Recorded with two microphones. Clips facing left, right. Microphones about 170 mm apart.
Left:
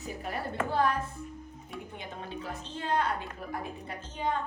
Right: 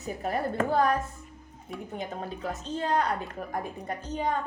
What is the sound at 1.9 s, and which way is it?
A woman's voice, 40° right (ahead or behind).